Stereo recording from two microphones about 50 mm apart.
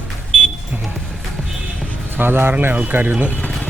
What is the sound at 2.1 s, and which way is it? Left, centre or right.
Speech, right.